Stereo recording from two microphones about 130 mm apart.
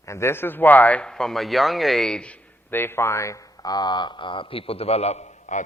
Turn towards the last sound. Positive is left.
turn(degrees=55)  # may be behind; listen again after turning